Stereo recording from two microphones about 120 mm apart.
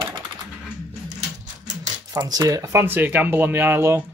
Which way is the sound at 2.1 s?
35° right (ahead or behind).